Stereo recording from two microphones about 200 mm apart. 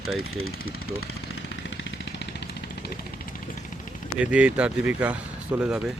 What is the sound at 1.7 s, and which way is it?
Vehicle, 60° left (ahead or behind).